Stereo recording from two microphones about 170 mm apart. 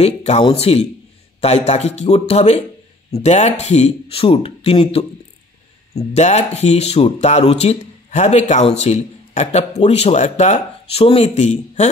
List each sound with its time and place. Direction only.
0.0 s speech: 40° left (ahead or behind)